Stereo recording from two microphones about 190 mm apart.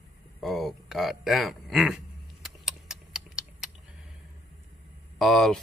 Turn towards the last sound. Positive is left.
turn(degrees=0)  # may be behind; listen again after turning